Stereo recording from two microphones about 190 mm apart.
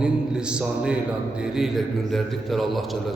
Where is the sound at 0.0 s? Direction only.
5° right (ahead or behind).